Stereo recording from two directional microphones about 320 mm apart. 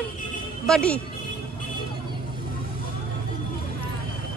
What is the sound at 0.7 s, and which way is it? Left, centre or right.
Speech, centre.